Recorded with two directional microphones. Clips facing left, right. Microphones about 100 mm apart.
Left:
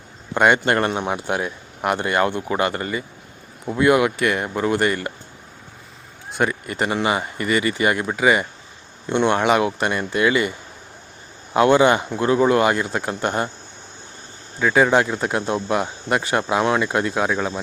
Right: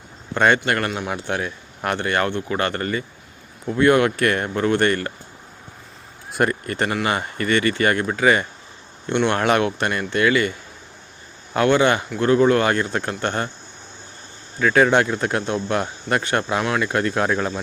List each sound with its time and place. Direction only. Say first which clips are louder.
0.3 s speech: left 1 dB; 15° left (ahead or behind)
0.6 s speech: left 3 dB; 25° left (ahead or behind); by 5.1 s 10° left (ahead or behind)
6.3 s speech: right 1 dB; centre (ahead or behind)
6.9 s speech: left 1 dB; 20° left (ahead or behind)
11.5 s speech: left 2 dB; 20° left (ahead or behind)
14.6 s speech: even; 10° left (ahead or behind)